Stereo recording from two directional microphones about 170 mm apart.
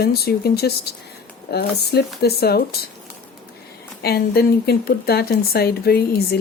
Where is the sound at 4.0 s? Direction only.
65° left (ahead or behind).